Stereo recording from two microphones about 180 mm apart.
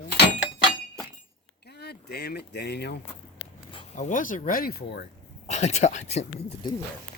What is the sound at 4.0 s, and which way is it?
Speech, 45° left (ahead or behind).